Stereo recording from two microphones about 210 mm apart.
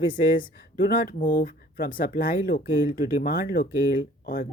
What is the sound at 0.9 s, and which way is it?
Speech, 45° left (ahead or behind).